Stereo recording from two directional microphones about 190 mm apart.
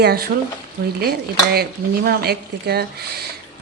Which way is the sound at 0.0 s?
55° right (ahead or behind).